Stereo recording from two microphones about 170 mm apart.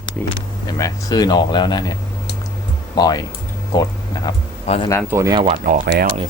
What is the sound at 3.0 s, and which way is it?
Speech, 20° left (ahead or behind).